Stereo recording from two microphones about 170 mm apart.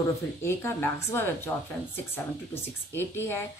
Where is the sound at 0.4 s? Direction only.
15° left (ahead or behind).